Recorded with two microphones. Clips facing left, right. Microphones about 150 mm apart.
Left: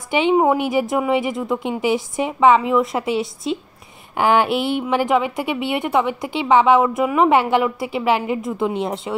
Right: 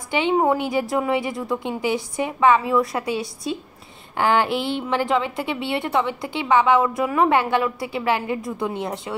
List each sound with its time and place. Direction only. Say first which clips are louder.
0.1 s a woman's voice: left 3 dB; 15° left (ahead or behind)